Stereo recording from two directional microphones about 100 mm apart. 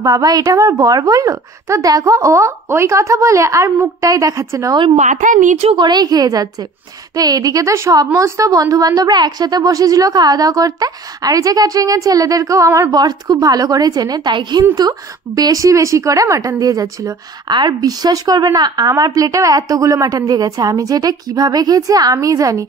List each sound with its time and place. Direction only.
0.0 s a woman's voice: 40° right (ahead or behind)
5.8 s a woman's voice: 45° right (ahead or behind)
17.5 s a woman's voice: 50° right (ahead or behind)